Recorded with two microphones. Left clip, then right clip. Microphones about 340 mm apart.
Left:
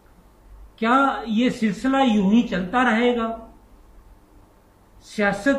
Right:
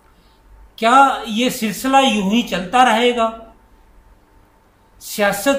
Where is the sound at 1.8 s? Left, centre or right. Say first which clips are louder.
Right 7 dB; centre.